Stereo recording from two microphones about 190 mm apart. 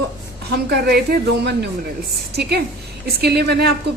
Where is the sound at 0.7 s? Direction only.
60° right (ahead or behind).